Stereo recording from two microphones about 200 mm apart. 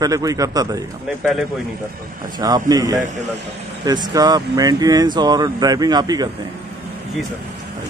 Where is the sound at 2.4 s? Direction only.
20° right (ahead or behind).